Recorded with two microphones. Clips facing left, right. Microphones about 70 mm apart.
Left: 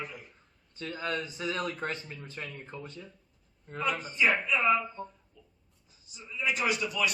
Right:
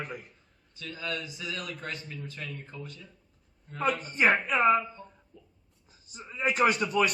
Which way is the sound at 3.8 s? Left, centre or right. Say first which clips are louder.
Right 2 dB; right.